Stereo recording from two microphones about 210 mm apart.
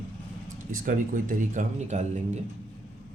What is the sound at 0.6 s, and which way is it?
Speech, 40° right (ahead or behind).